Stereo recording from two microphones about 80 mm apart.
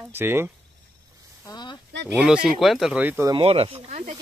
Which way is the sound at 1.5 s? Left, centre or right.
Left.